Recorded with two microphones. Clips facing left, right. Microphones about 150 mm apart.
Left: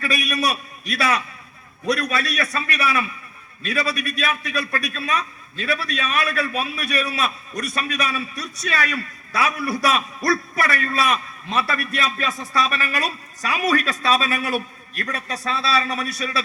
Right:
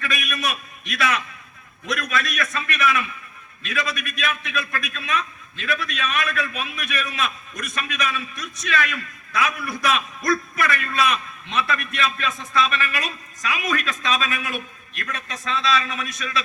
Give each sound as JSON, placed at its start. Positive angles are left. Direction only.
{"t": 0.0, "sound": "a man's voice", "side_deg": 35}